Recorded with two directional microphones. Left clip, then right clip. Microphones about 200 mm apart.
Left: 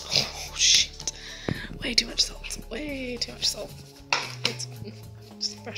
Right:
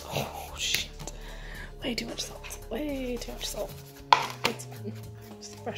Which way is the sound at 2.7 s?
10° right (ahead or behind).